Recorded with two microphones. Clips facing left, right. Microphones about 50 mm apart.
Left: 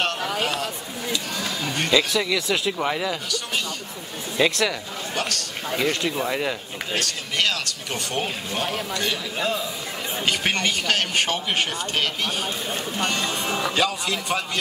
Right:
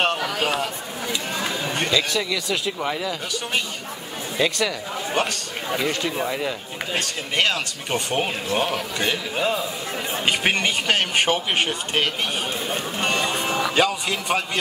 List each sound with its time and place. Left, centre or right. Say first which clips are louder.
0.0 s a sound: right 3 dB; centre
1.1 s speech: right 2 dB; right
1.9 s speech: left 4 dB; centre
4.4 s speech: left 2 dB; centre
5.1 s speech: right 3 dB; centre
5.8 s speech: left 1 dB; centre
7.0 s speech: right 2 dB; right